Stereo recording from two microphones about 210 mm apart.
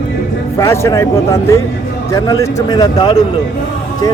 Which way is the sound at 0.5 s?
15° left (ahead or behind).